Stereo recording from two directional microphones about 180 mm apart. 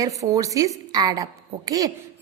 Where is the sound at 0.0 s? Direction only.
20° right (ahead or behind).